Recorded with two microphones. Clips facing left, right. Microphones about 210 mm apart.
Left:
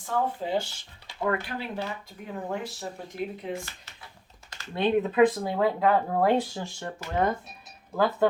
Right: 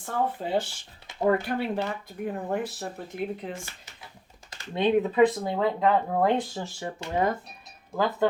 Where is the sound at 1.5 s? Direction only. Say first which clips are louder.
Right 5 dB; 55° right (ahead or behind).